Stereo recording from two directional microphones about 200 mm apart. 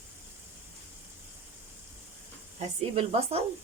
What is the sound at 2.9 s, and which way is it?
Speech, 30° right (ahead or behind).